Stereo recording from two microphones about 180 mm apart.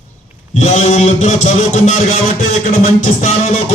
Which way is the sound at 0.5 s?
40° left (ahead or behind).